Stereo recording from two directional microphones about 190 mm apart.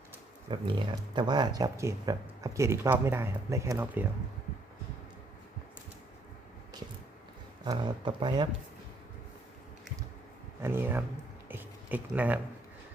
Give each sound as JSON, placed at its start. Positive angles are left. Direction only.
{"t": 0.5, "sound": "speech", "side_deg": -25}
{"t": 7.6, "sound": "speech", "side_deg": -25}
{"t": 10.6, "sound": "speech", "side_deg": -10}